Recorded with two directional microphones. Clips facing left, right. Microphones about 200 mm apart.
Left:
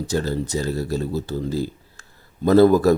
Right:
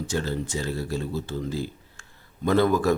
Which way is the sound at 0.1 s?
40° left (ahead or behind).